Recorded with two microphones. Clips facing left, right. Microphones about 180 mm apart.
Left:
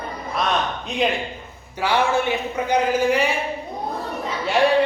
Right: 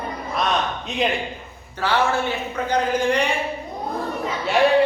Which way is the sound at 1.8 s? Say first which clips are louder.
Left 1 dB; 15° left (ahead or behind).